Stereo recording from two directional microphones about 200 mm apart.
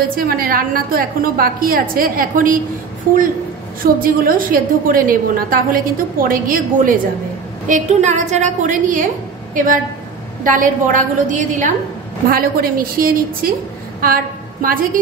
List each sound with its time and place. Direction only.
0.1 s a woman's voice: 45° right (ahead or behind)
3.8 s a woman's voice: 45° right (ahead or behind)